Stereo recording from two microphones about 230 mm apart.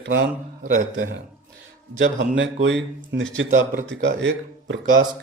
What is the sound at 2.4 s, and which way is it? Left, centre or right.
Speech, right.